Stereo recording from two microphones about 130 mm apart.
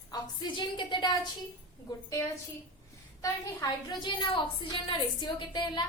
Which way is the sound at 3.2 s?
30° left (ahead or behind).